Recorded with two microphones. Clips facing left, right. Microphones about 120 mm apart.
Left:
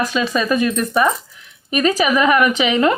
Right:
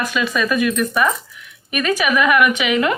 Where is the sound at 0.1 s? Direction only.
30° left (ahead or behind).